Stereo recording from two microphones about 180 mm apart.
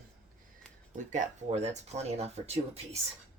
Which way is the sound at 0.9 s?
45° right (ahead or behind).